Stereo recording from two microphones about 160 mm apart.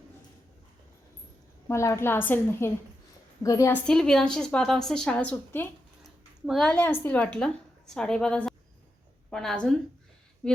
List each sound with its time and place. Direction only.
1.6 s a woman's voice: 15° left (ahead or behind)
3.8 s a woman's voice: 5° left (ahead or behind)
6.7 s a woman's voice: 15° left (ahead or behind)